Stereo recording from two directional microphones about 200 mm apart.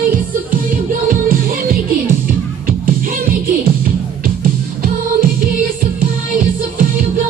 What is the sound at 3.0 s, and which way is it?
Music, 45° right (ahead or behind).